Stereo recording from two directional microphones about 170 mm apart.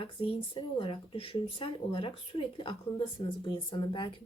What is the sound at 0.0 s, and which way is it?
Speech, 30° left (ahead or behind).